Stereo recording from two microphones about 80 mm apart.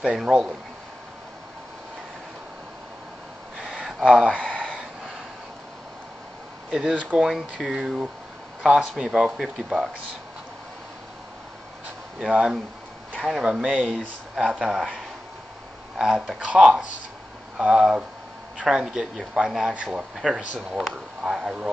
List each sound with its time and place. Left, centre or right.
0.0 s speech: centre
3.5 s a sound: centre
4.1 s speech: centre
4.6 s a sound: centre
6.7 s speech: centre
12.3 s speech: centre
16.0 s speech: centre